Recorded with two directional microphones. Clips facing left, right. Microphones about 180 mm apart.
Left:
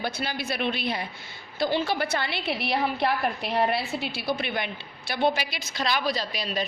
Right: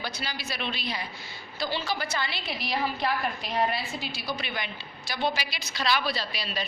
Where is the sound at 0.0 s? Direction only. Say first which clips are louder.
Left 5 dB; 55° left (ahead or behind).